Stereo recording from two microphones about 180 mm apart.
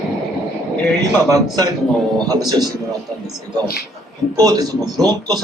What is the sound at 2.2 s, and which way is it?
Speech, 20° right (ahead or behind).